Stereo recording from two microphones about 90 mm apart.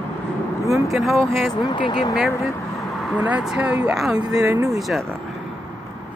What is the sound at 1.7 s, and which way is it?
Speech, 60° left (ahead or behind).